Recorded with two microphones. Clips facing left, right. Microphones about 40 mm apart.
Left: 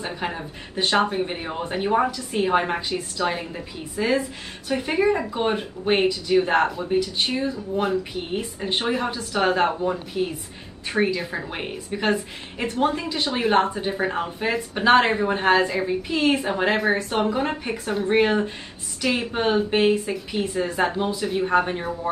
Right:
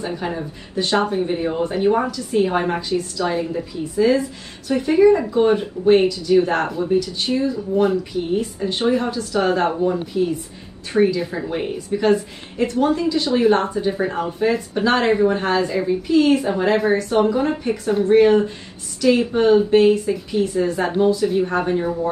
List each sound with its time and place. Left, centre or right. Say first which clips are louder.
0.0 s a woman's voice: right 4 dB; left
2.9 s a woman's voice: right 4 dB; left
9.5 s a woman's voice: right 2 dB; left